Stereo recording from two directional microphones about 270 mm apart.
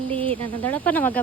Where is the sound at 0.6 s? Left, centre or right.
Centre.